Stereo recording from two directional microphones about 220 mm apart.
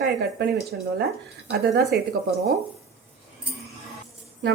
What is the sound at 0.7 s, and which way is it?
Speech, 50° right (ahead or behind).